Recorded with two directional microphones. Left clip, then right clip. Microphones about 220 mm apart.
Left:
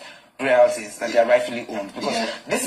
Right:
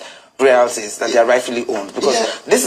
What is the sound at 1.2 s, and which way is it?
A man's voice, 50° right (ahead or behind).